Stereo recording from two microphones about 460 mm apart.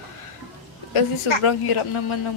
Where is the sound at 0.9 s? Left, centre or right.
Left.